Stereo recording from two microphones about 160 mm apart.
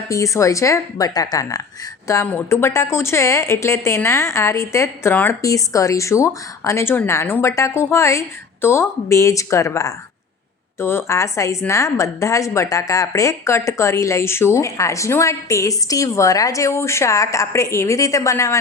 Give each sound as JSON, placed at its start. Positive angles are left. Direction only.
{"t": 0.1, "sound": "a woman's voice", "side_deg": 20}